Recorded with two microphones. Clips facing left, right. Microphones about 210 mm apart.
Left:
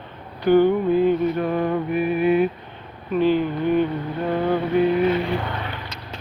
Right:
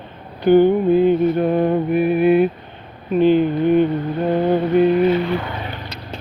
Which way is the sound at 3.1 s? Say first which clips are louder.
Right 5 dB; 20° right (ahead or behind).